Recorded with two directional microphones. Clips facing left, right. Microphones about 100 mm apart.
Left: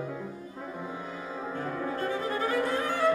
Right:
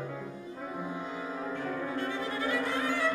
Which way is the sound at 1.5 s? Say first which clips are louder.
Left 3 dB; 40° left (ahead or behind).